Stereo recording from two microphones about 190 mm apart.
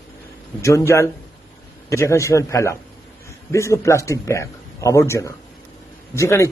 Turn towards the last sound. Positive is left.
turn(degrees=15)  # may be behind; listen again after turning